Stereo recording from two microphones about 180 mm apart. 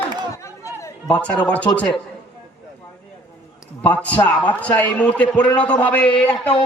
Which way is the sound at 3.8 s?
10° left (ahead or behind).